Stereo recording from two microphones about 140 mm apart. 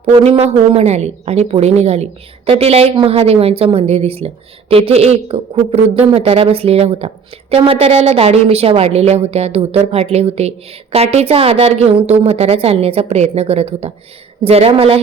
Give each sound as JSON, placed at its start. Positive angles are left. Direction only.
{"t": 0.0, "sound": "a woman's voice", "side_deg": -45}